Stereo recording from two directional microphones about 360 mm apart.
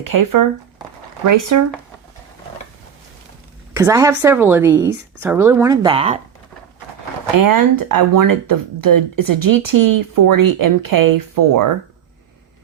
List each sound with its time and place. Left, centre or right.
0.1 s speech: right
3.8 s a woman's voice: centre
7.3 s speech: right